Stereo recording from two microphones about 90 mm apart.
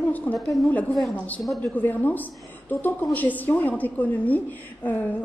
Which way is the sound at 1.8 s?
20° left (ahead or behind).